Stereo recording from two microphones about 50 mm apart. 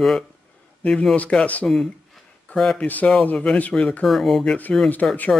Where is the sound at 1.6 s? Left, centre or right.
Centre.